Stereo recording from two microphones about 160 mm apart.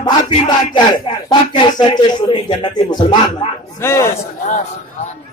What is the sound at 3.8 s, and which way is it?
Speech, 15° left (ahead or behind).